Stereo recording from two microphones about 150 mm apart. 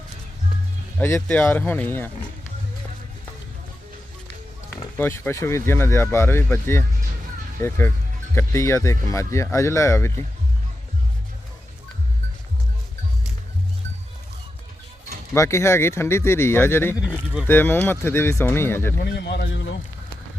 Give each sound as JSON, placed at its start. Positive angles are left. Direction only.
{"t": 0.9, "sound": "speech", "side_deg": 15}
{"t": 4.9, "sound": "speech", "side_deg": 15}
{"t": 15.4, "sound": "speech", "side_deg": 20}
{"t": 18.9, "sound": "a man's voice", "side_deg": 90}